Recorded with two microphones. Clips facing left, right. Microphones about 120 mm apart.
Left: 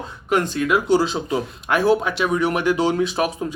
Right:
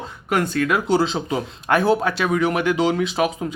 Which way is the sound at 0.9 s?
25° right (ahead or behind).